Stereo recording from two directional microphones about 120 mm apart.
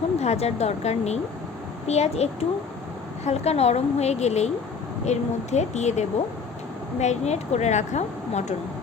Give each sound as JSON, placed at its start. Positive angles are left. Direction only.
{"t": 0.2, "sound": "a woman's voice", "side_deg": 65}